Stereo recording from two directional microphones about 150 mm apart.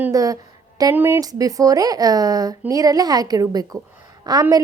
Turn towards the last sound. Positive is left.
turn(degrees=-25)  # may be behind; listen again after turning